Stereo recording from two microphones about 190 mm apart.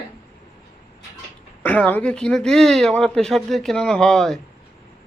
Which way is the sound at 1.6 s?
10° left (ahead or behind).